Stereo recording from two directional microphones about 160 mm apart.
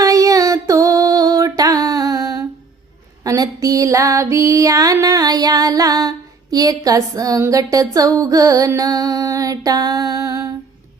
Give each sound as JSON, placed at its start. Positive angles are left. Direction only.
{"t": 0.0, "sound": "music", "side_deg": -20}
{"t": 3.2, "sound": "female singing", "side_deg": -20}